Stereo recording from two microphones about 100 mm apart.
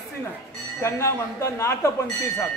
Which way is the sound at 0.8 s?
25° left (ahead or behind).